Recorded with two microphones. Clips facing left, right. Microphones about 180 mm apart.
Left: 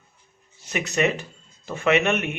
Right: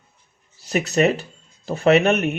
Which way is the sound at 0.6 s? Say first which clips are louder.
Right 5 dB; 35° right (ahead or behind).